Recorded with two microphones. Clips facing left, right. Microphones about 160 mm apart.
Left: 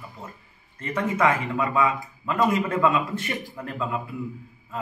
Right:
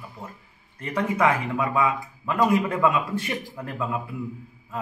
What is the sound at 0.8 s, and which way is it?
Speech, 10° right (ahead or behind).